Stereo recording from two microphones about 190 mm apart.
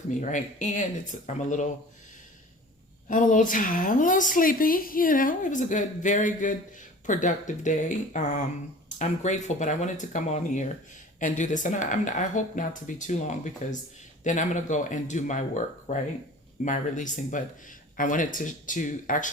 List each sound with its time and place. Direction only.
0.1 s speech: 40° left (ahead or behind)
3.1 s a woman's voice: 45° left (ahead or behind)